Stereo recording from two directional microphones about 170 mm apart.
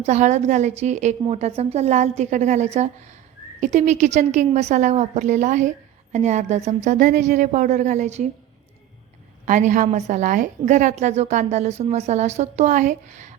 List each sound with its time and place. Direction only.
0.0 s a woman's voice: 40° right (ahead or behind)
9.5 s a woman's voice: 45° right (ahead or behind)